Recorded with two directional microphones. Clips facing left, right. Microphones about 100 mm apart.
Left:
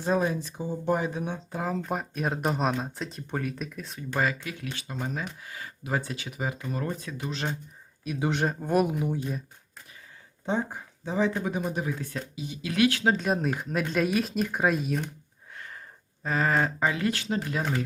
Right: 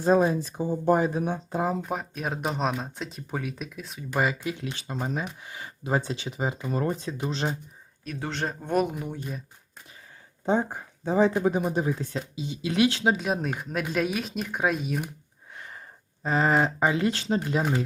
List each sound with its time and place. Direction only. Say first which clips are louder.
0.0 s speech: right 5 dB; 35° right (ahead or behind)
0.4 s speech: right 5 dB; 45° right (ahead or behind)
1.8 s speech: left 1 dB; centre (ahead or behind)
4.2 s speech: right 2 dB; 20° right (ahead or behind)
8.0 s speech: left 4 dB; 10° left (ahead or behind)
10.4 s speech: right 4 dB; 40° right (ahead or behind)
11.7 s speech: right 4 dB; 30° right (ahead or behind)
13.1 s speech: left 1 dB; centre (ahead or behind)
15.5 s a sound: even; 20° right (ahead or behind)
16.2 s speech: right 3 dB; 25° right (ahead or behind)